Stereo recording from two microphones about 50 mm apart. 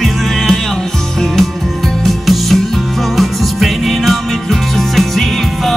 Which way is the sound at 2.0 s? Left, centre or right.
Centre.